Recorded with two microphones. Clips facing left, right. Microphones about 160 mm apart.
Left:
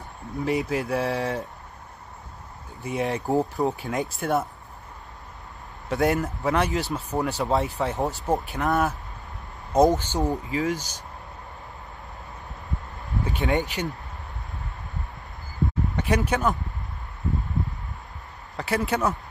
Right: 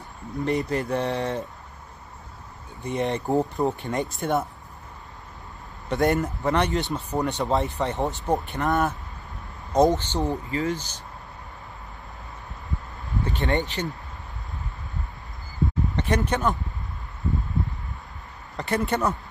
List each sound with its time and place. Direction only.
0.4 s speech: 5° left (ahead or behind)
2.8 s speech: 5° left (ahead or behind)
5.9 s speech: centre (ahead or behind)
9.9 s speech: 10° left (ahead or behind)
13.2 s speech: centre (ahead or behind)
16.0 s speech: 5° left (ahead or behind)
18.6 s speech: centre (ahead or behind)